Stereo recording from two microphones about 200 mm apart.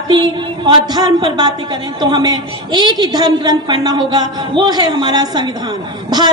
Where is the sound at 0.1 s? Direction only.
25° right (ahead or behind).